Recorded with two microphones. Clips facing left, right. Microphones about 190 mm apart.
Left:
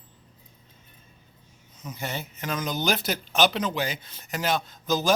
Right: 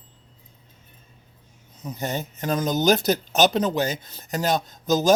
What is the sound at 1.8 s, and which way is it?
Speech, 40° right (ahead or behind).